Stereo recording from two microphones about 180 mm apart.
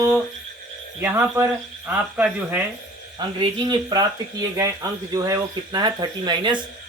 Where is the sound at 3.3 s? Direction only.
25° right (ahead or behind).